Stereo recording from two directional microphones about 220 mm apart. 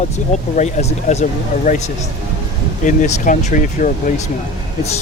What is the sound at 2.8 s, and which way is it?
Speech, 35° left (ahead or behind).